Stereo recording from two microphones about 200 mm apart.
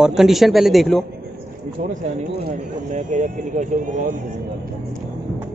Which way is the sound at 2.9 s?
40° right (ahead or behind).